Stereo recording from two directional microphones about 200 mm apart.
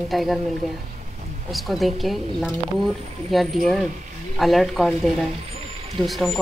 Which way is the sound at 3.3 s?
Centre (ahead or behind).